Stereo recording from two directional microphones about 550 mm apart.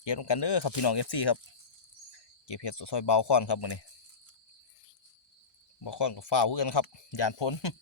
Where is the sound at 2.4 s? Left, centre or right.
Left.